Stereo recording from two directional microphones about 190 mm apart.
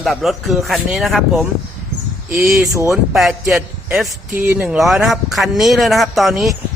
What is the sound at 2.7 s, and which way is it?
Speech, 15° right (ahead or behind).